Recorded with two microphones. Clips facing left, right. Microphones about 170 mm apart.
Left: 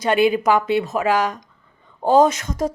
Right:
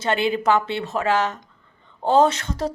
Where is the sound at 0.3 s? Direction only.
10° left (ahead or behind).